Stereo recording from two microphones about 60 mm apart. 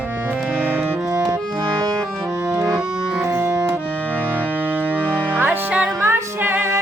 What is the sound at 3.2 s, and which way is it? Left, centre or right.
Music, right.